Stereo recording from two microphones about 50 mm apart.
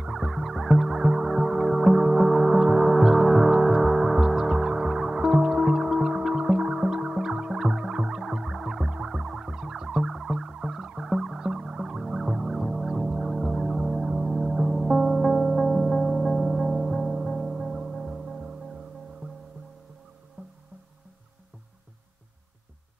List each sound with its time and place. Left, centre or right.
0.0 s music: centre
20.4 s music: right